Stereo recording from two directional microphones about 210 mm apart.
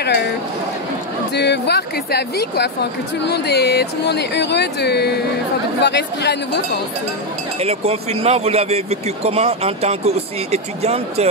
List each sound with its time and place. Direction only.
1.3 s speech: 55° left (ahead or behind)
7.6 s speech: 30° right (ahead or behind)